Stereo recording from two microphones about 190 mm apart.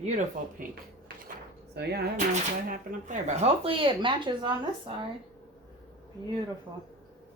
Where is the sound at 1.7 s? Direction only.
60° right (ahead or behind).